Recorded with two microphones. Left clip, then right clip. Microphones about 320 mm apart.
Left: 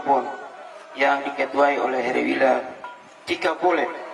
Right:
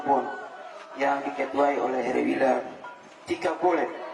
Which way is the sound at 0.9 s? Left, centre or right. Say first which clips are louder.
Left 5 dB; centre.